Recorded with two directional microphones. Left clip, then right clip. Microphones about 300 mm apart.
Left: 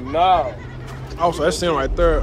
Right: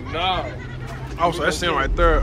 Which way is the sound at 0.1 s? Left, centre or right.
Left.